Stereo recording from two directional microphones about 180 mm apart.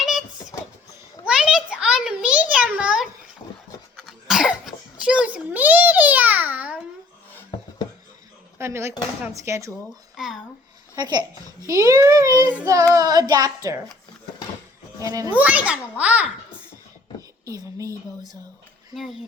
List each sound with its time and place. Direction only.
0.0 s a sound: centre (ahead or behind)
3.9 s cough: centre (ahead or behind)
8.5 s speech: 15° right (ahead or behind)
10.9 s a child's voice: 25° right (ahead or behind)
15.0 s a child's voice: 20° right (ahead or behind)
15.4 s speech: 10° right (ahead or behind)
17.4 s speech: 20° right (ahead or behind)